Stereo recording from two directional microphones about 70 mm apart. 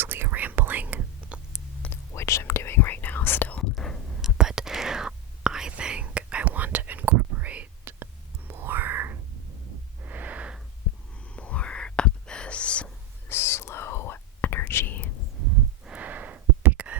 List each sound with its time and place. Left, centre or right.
0.0 s whispering: right
1.9 s whispering: left
3.8 s whispering: centre
4.2 s whispering: centre
8.4 s whispering: right
10.0 s wheeze: right
11.3 s whispering: centre
13.2 s whispering: left
15.8 s a sound: centre